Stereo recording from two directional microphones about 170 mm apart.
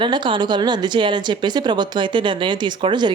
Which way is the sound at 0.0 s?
25° right (ahead or behind).